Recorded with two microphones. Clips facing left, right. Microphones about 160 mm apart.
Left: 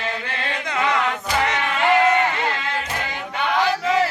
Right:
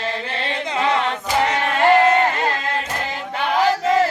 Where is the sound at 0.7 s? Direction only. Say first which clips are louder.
Right 1 dB; 25° right (ahead or behind).